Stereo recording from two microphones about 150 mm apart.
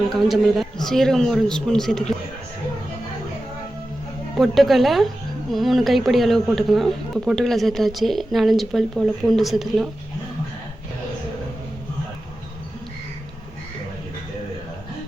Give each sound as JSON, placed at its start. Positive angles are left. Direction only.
{"t": 0.1, "sound": "a woman's voice", "side_deg": 0}
{"t": 4.4, "sound": "a woman's voice", "side_deg": 0}